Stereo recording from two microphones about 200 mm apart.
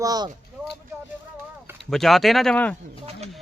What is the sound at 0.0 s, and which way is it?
Speech, 20° right (ahead or behind).